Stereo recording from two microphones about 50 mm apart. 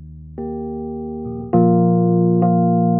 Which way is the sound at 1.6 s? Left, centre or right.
Left.